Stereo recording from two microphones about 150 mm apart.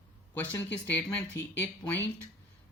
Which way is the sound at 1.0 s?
10° left (ahead or behind).